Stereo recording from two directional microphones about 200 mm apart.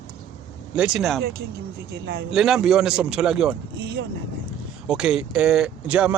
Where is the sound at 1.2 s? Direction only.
50° right (ahead or behind).